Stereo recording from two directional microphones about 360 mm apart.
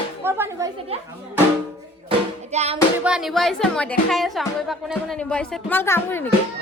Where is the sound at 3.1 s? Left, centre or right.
Centre.